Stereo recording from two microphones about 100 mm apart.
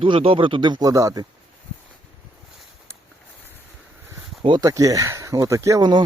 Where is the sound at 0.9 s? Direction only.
35° right (ahead or behind).